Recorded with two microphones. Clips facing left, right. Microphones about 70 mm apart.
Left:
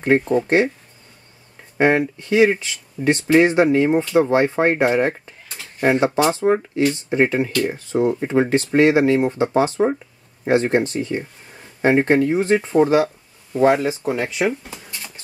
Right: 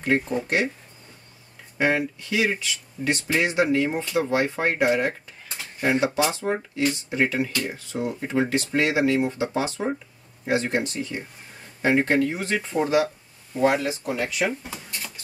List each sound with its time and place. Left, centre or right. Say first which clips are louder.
0.0 s speech: left 7 dB; left
1.8 s speech: left 6 dB; left